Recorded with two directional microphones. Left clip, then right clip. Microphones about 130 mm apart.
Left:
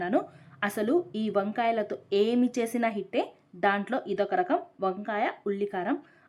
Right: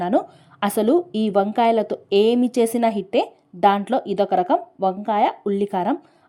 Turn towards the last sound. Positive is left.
turn(degrees=-40)  # may be behind; listen again after turning